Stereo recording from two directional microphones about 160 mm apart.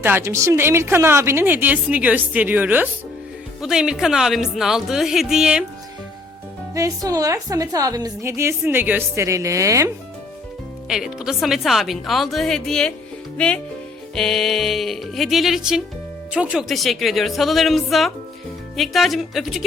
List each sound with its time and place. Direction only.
0.0 s a woman's voice: 15° right (ahead or behind)
6.7 s a woman's voice: 20° right (ahead or behind)
10.8 s a woman's voice: 5° right (ahead or behind)